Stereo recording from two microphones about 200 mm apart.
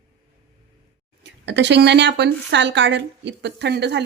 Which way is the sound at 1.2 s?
60° right (ahead or behind).